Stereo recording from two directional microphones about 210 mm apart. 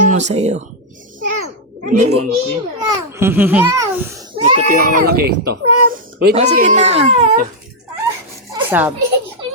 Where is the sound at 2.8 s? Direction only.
15° right (ahead or behind).